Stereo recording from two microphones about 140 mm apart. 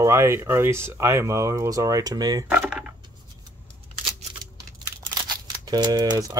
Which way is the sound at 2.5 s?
10° right (ahead or behind).